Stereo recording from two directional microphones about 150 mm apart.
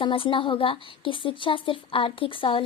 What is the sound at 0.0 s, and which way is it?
Speech, 35° left (ahead or behind).